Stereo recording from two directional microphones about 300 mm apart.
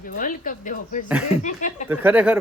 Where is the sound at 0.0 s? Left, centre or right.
Left.